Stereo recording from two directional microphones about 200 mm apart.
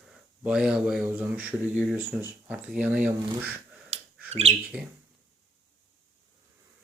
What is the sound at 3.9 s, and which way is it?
Bird, 30° right (ahead or behind).